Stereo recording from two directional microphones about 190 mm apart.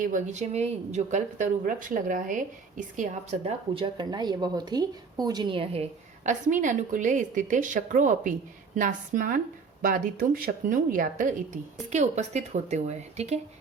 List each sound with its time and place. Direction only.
0.0 s speech: 40° right (ahead or behind)